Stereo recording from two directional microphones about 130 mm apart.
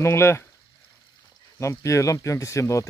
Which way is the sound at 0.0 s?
20° left (ahead or behind).